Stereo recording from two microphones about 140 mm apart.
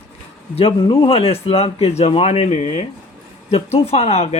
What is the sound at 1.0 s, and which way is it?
Speech, 45° left (ahead or behind).